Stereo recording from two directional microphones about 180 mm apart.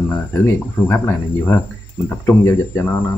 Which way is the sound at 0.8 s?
15° left (ahead or behind).